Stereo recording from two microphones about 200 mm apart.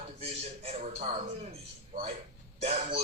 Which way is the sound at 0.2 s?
30° right (ahead or behind).